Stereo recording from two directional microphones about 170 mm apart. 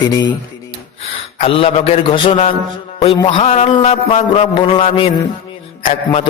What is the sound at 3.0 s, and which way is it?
Mantra, 30° left (ahead or behind).